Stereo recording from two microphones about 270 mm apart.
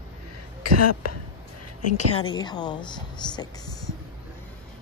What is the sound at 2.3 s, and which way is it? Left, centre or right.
Speech, centre.